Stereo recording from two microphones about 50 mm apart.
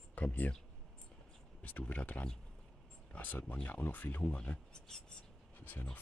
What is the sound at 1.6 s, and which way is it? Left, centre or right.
Speech, left.